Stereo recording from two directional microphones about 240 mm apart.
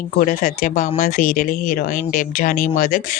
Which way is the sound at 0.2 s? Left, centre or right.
Left.